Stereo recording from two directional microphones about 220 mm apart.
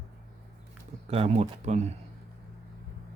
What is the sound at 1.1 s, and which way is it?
Speech, 30° right (ahead or behind).